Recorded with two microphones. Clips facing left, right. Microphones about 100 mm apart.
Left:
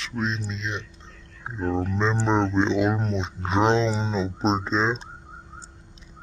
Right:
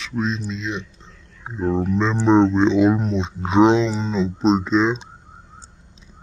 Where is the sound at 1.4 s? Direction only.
10° right (ahead or behind).